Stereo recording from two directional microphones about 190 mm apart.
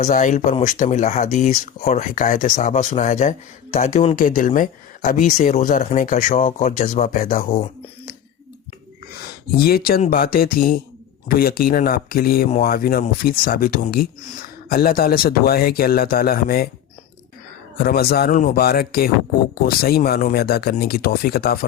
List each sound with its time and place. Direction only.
0.0 s speech: 40° left (ahead or behind)
9.6 s speech: 55° left (ahead or behind)
17.7 s speech: 50° left (ahead or behind)